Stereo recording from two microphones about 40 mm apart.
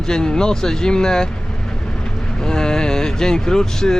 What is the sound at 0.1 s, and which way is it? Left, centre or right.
Speech, centre.